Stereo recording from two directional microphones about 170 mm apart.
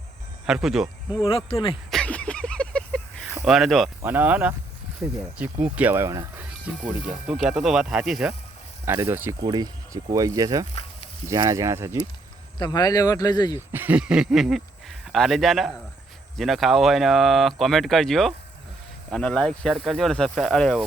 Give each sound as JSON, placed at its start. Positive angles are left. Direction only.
{"t": 0.4, "sound": "speech", "side_deg": -5}
{"t": 1.5, "sound": "speech", "side_deg": 30}
{"t": 1.9, "sound": "a sound", "side_deg": 5}
{"t": 3.2, "sound": "speech", "side_deg": -5}
{"t": 8.8, "sound": "speech", "side_deg": -15}
{"t": 9.4, "sound": "speech", "side_deg": -25}
{"t": 12.5, "sound": "speech", "side_deg": 25}
{"t": 13.6, "sound": "speech", "side_deg": -10}